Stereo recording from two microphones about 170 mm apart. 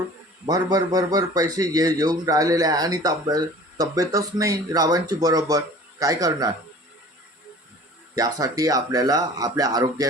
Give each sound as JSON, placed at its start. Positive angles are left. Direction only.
{"t": 0.4, "sound": "a man's voice", "side_deg": -25}
{"t": 8.1, "sound": "a man's voice", "side_deg": -20}